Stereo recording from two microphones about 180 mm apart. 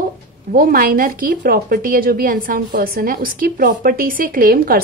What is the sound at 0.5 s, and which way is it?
A woman's voice, 55° right (ahead or behind).